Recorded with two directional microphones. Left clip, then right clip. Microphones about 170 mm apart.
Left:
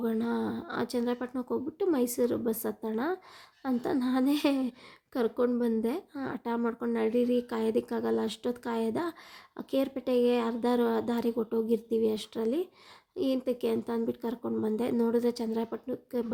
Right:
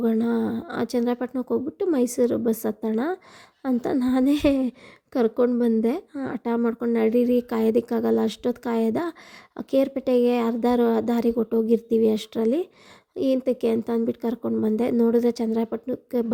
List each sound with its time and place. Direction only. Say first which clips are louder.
0.0 s speech: right 7 dB; 35° right (ahead or behind)